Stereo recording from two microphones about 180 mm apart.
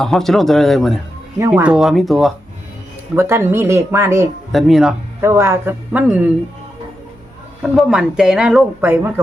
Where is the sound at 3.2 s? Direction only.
15° right (ahead or behind).